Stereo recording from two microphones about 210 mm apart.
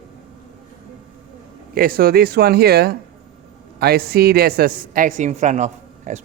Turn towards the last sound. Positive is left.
turn(degrees=-35)  # may be behind; listen again after turning